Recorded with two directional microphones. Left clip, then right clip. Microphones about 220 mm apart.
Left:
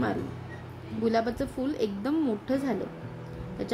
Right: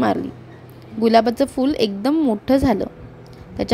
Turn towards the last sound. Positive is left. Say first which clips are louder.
# right 11 dB
turn(degrees=-35)  # may be behind; listen again after turning